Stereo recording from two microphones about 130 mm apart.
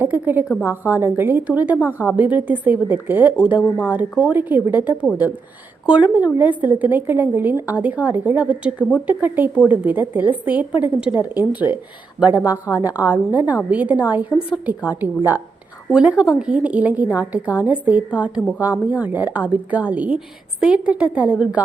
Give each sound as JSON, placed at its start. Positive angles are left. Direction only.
{"t": 0.0, "sound": "a woman's voice", "side_deg": -15}
{"t": 0.4, "sound": "a woman's voice", "side_deg": 20}
{"t": 0.7, "sound": "a woman's voice", "side_deg": -15}